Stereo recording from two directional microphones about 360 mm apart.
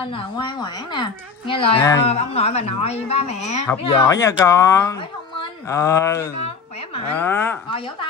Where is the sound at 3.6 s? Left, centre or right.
Centre.